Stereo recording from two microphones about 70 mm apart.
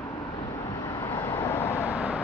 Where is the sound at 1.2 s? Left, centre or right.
Left.